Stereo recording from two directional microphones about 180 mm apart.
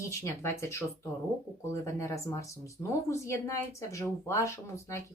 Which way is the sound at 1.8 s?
15° left (ahead or behind).